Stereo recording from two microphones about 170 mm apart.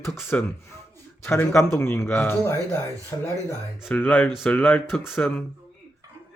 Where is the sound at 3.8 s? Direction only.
10° left (ahead or behind).